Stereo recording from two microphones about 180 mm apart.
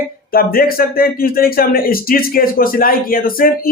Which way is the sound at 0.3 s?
55° left (ahead or behind).